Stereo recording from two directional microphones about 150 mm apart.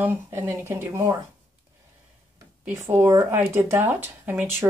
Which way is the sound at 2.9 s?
15° right (ahead or behind).